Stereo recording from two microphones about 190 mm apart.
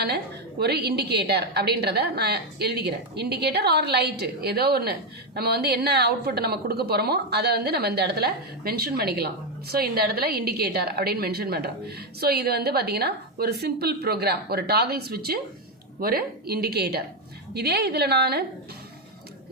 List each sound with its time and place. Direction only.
0.6 s a woman's voice: 60° right (ahead or behind)